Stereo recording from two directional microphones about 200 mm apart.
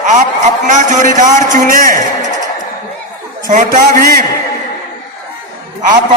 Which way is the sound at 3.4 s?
40° right (ahead or behind).